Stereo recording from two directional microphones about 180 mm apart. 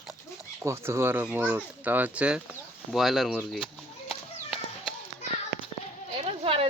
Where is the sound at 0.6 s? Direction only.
15° right (ahead or behind).